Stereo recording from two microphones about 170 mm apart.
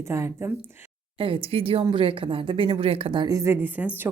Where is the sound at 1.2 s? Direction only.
30° right (ahead or behind).